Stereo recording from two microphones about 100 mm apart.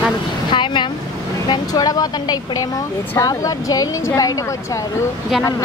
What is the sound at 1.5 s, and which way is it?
Speech, 40° left (ahead or behind).